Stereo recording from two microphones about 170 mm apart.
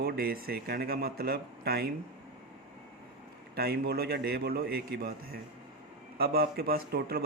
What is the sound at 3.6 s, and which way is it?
A man's voice, 65° right (ahead or behind).